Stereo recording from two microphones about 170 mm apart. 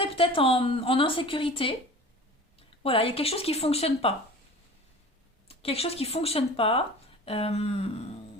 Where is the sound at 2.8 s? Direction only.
35° left (ahead or behind).